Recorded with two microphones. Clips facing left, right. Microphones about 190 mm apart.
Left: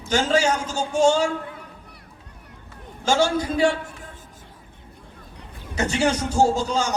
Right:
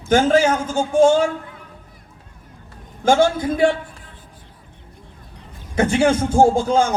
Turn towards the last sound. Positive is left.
turn(degrees=-55)  # may be behind; listen again after turning